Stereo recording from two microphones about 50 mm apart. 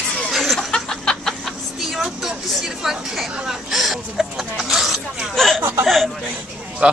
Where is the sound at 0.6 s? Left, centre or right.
Centre.